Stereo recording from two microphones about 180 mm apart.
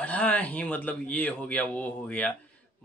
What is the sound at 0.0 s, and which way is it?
Speech, 10° left (ahead or behind).